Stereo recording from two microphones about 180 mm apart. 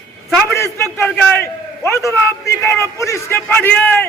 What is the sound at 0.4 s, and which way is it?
A man's voice, 15° left (ahead or behind).